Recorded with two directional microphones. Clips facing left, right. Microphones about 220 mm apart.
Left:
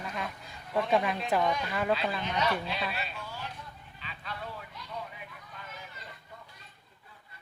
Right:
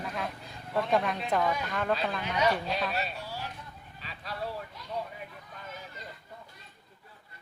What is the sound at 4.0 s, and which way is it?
Vehicle, 40° right (ahead or behind).